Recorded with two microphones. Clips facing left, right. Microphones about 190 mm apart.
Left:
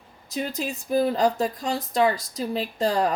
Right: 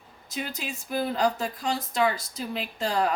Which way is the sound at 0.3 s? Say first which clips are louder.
Left 5 dB; 35° left (ahead or behind).